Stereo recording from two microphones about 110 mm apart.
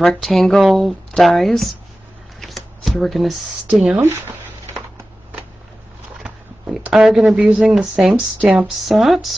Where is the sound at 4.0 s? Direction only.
20° right (ahead or behind).